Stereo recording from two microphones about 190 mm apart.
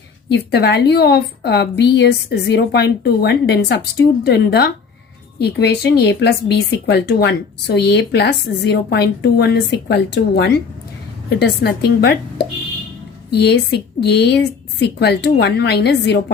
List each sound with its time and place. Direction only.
0.3 s a woman's voice: 60° left (ahead or behind)